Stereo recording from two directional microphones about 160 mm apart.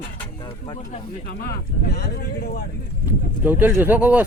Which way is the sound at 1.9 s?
85° left.